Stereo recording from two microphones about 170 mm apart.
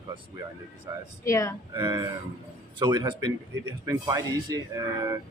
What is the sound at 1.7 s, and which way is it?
Speech, 20° right (ahead or behind).